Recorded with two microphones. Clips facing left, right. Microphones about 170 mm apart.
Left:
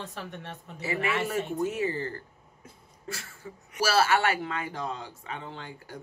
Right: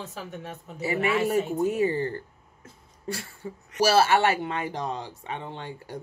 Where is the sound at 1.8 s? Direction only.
30° right (ahead or behind).